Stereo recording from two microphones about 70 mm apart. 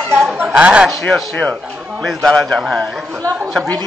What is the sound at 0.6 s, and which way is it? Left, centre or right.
Speech, centre.